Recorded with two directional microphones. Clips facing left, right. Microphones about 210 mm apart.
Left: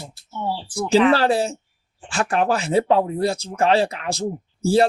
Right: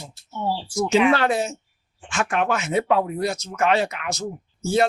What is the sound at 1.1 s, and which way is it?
Speech, 30° left (ahead or behind).